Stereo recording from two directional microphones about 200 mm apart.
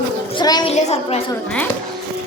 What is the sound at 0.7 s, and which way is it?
Speech, 35° left (ahead or behind).